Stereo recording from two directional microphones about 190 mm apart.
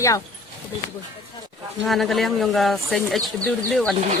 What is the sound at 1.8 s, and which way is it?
Speech, centre (ahead or behind).